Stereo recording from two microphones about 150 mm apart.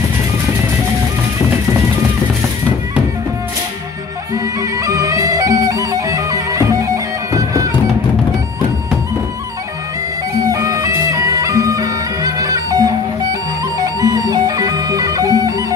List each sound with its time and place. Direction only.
4.6 s music: 20° right (ahead or behind)
10.5 s music: 20° right (ahead or behind)